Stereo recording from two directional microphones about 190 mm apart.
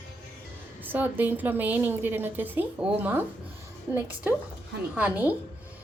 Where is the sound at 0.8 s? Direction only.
10° right (ahead or behind).